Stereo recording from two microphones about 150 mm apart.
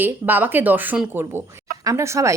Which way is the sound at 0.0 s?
15° right (ahead or behind).